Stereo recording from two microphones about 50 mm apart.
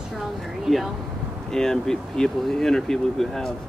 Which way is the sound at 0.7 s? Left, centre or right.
Centre.